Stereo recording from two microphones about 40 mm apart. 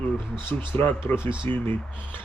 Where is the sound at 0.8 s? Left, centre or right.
Left.